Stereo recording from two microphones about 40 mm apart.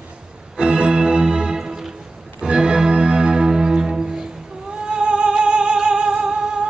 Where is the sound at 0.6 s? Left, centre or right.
Right.